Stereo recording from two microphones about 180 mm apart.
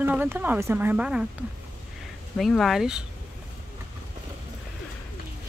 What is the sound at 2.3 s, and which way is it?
Speech, centre (ahead or behind).